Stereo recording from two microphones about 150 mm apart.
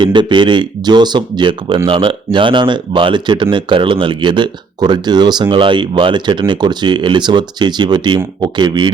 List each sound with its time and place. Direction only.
0.0 s speech: 30° right (ahead or behind)